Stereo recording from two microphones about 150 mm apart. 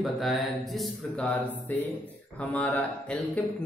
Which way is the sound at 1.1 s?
10° left (ahead or behind).